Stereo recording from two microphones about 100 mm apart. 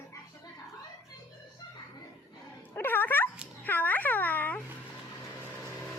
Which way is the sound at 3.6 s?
20° left (ahead or behind).